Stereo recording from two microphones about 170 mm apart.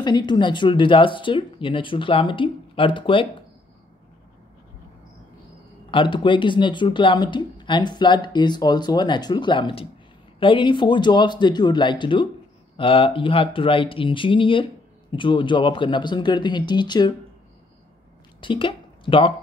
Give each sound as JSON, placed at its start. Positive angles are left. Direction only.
{"t": 0.0, "sound": "speech", "side_deg": 25}
{"t": 5.9, "sound": "speech", "side_deg": 30}
{"t": 18.4, "sound": "speech", "side_deg": 30}